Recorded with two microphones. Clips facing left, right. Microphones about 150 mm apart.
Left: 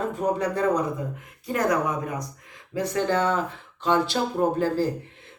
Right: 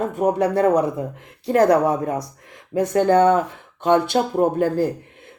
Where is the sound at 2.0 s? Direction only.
55° right (ahead or behind).